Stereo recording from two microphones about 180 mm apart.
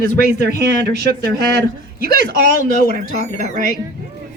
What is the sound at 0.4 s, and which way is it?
Speech, 60° right (ahead or behind).